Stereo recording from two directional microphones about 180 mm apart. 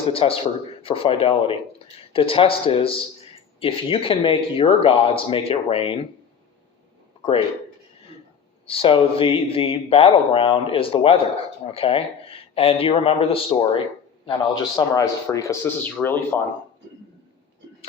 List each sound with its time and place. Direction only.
0.1 s a man's voice: 30° left (ahead or behind)
8.6 s a man's voice: 30° left (ahead or behind); by 16.4 s 10° left (ahead or behind)